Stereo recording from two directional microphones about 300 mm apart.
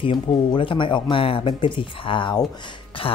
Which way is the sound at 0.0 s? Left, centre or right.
Centre.